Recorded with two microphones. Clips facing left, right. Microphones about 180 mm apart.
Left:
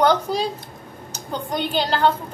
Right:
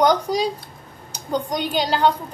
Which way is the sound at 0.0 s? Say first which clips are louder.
Right 1 dB; 15° right (ahead or behind).